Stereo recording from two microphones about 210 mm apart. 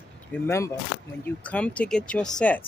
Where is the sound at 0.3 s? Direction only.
10° left (ahead or behind).